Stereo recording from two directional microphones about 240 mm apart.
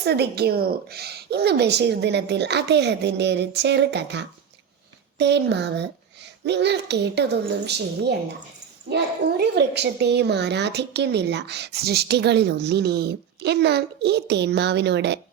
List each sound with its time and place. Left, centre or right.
0.0 s a woman's voice: right
9.6 s a woman's voice: right